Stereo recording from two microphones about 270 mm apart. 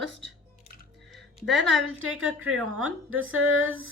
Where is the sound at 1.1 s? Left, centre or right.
Centre.